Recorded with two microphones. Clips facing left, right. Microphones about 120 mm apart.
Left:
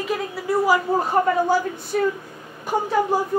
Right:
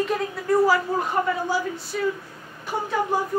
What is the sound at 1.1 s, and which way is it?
Speech, 50° left (ahead or behind).